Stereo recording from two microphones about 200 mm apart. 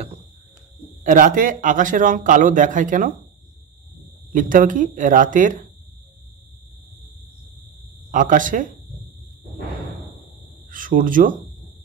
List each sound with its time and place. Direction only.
1.0 s a man's voice: 40° right (ahead or behind)
4.3 s a man's voice: 40° right (ahead or behind)
8.1 s a man's voice: 40° right (ahead or behind)
10.7 s speech: 45° right (ahead or behind)